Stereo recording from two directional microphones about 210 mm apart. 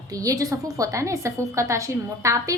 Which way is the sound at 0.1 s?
15° right (ahead or behind).